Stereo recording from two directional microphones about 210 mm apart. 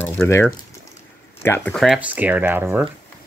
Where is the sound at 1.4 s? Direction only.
10° left (ahead or behind).